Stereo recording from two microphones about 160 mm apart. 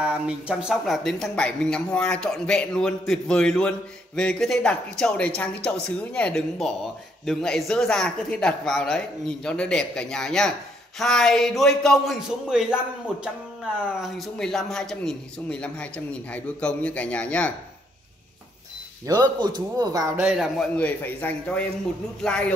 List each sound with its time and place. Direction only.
0.0 s speech: 5° right (ahead or behind)
14.0 s a man's voice: centre (ahead or behind)
19.0 s speech: 25° right (ahead or behind)
20.2 s a man's voice: 5° right (ahead or behind)